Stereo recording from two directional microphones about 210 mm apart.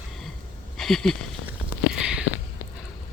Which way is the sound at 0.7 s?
Centre (ahead or behind).